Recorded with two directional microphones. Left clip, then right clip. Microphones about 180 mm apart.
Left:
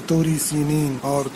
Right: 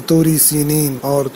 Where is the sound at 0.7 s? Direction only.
20° right (ahead or behind).